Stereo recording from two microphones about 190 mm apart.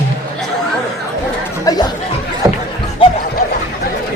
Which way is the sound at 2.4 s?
15° right (ahead or behind).